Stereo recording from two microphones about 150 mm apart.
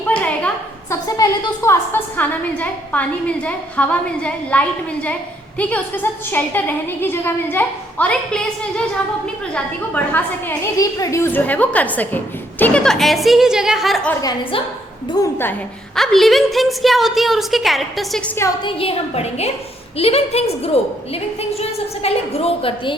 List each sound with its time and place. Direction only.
0.1 s a sound: 10° left (ahead or behind)
1.0 s a woman's voice: 25° left (ahead or behind); by 8.8 s 5° left (ahead or behind)
9.9 s a woman's voice: 10° left (ahead or behind)
14.1 s a woman's voice: 25° left (ahead or behind)
16.0 s a woman's voice: centre (ahead or behind)
18.6 s a woman's voice: 40° left (ahead or behind)
21.6 s a woman's voice: 40° left (ahead or behind)